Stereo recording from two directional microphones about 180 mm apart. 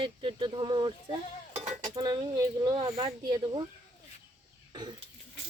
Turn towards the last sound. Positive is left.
turn(degrees=-25)  # may be behind; listen again after turning